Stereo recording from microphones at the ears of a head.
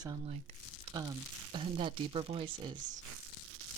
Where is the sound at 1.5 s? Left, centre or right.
Right.